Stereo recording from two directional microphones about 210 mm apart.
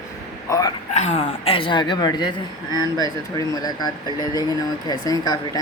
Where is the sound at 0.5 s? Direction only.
15° left (ahead or behind).